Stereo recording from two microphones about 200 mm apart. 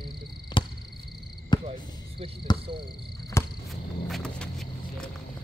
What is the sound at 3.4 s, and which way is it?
Cricket, 15° left (ahead or behind).